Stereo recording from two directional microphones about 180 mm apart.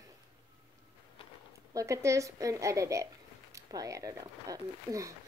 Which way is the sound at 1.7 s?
15° right (ahead or behind).